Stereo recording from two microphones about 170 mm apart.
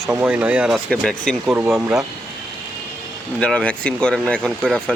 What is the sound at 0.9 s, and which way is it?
Speech, 5° left (ahead or behind).